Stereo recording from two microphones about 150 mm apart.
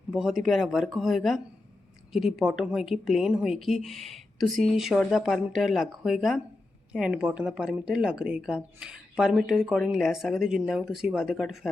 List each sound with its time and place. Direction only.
0.1 s speech: centre (ahead or behind)